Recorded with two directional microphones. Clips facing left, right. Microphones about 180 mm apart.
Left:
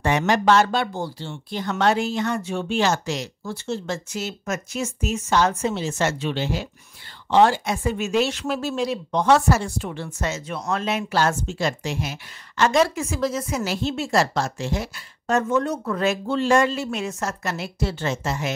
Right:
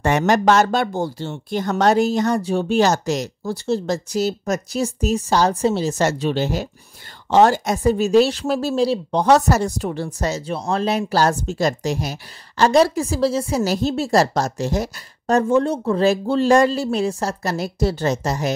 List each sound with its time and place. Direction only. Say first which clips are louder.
0.0 s speech: right 3 dB; 45° right (ahead or behind)